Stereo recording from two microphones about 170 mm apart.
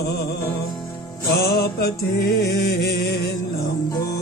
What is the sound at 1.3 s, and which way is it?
Music, 65° left (ahead or behind).